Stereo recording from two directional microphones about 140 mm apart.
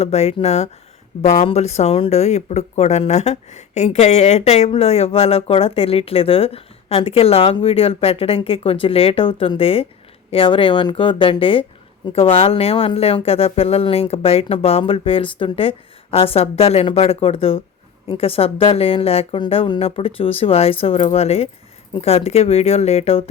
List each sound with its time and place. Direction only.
0.0 s speech: 50° left (ahead or behind)